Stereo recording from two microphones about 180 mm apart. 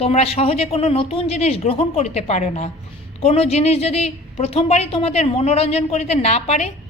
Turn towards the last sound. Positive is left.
turn(degrees=35)  # may be behind; listen again after turning